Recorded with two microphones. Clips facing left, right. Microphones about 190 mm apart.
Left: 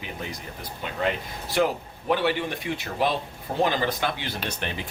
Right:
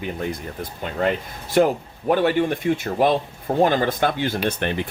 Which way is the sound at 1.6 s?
45° right (ahead or behind).